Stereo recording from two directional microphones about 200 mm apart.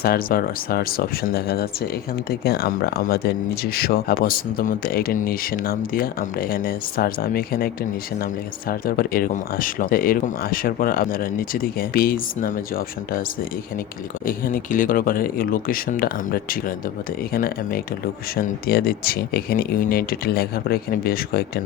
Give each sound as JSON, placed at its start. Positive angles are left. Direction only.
{"t": 0.0, "sound": "speech", "side_deg": 50}
{"t": 8.7, "sound": "speech", "side_deg": 45}
{"t": 14.3, "sound": "speech", "side_deg": 45}